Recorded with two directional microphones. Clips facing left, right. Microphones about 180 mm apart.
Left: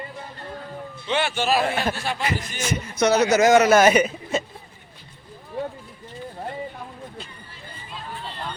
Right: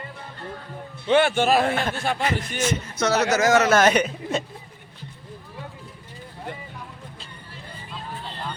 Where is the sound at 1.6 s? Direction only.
5° left (ahead or behind).